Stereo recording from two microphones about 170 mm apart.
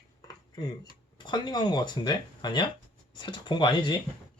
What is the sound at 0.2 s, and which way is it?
Dishes, 25° left (ahead or behind).